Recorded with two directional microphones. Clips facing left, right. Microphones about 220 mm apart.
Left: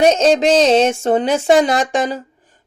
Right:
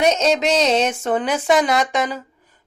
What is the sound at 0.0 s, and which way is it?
Speech, 30° left (ahead or behind).